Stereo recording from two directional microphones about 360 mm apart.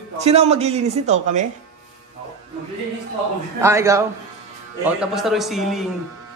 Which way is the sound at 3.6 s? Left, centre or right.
Centre.